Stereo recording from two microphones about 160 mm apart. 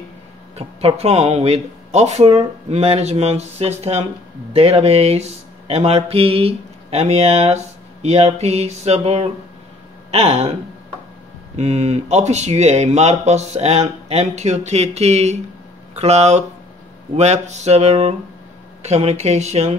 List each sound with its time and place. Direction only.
0.6 s speech: 40° right (ahead or behind)